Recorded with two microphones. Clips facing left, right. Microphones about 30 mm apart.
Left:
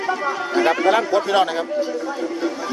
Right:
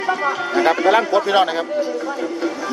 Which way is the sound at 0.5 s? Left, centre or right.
Centre.